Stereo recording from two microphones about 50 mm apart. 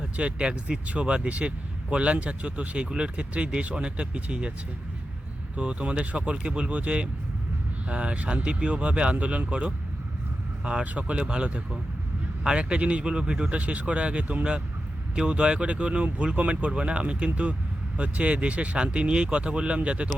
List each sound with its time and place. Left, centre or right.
0.2 s speech: right
5.5 s speech: right